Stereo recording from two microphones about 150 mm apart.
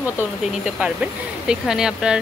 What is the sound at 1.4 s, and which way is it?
Speech, 5° right (ahead or behind).